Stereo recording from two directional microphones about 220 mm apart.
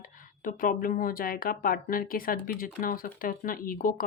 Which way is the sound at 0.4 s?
40° left (ahead or behind).